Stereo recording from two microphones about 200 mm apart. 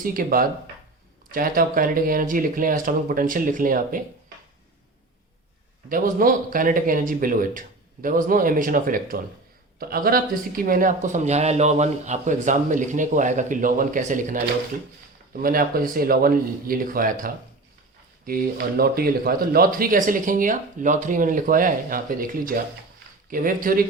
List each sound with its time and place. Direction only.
0.0 s speech: 45° right (ahead or behind)
5.9 s speech: 45° right (ahead or behind)